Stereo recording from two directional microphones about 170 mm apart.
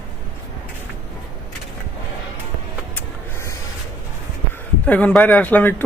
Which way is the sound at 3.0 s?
15° left (ahead or behind).